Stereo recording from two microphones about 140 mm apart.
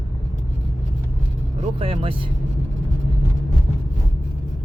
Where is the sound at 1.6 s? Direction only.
40° right (ahead or behind).